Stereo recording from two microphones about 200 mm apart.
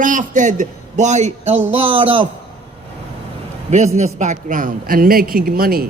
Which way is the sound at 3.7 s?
35° right (ahead or behind).